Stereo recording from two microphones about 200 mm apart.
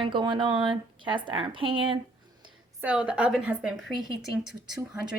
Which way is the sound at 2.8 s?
5° right (ahead or behind).